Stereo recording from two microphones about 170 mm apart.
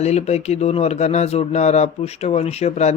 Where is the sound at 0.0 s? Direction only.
40° left (ahead or behind).